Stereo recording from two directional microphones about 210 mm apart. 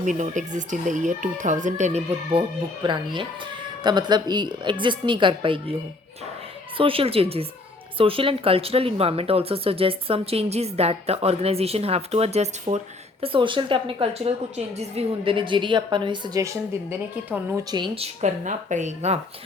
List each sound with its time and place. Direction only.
0.0 s speech: 35° right (ahead or behind)
6.7 s a woman's voice: 25° right (ahead or behind); by 17.7 s 10° right (ahead or behind)
17.7 s speech: 20° right (ahead or behind)